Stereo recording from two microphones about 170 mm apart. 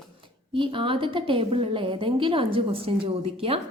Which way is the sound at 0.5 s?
30° right (ahead or behind).